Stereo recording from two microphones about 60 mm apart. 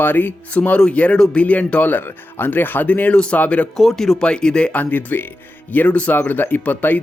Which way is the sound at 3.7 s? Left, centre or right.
Centre.